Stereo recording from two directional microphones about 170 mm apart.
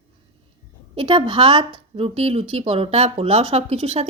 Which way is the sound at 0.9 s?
30° right (ahead or behind).